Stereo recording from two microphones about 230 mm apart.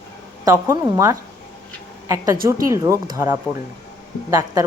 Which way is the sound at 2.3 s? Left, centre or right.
Right.